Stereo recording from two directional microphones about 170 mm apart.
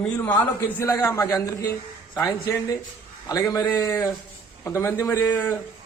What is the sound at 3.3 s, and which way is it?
A man's voice, 20° left (ahead or behind).